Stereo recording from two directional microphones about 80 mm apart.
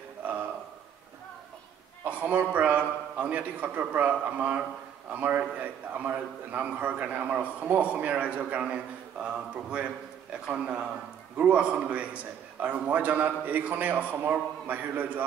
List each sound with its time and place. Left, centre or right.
2.0 s a man's voice: centre